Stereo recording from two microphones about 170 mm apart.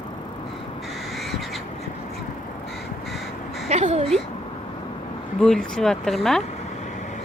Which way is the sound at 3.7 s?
40° right (ahead or behind).